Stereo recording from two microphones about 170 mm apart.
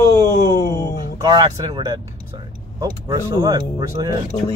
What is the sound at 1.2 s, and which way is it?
Speech, 20° right (ahead or behind).